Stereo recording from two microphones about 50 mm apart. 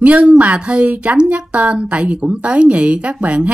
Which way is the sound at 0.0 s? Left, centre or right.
Right.